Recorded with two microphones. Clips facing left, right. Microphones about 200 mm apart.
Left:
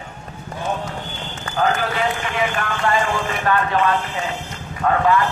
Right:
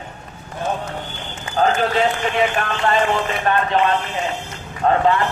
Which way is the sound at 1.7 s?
25° right (ahead or behind).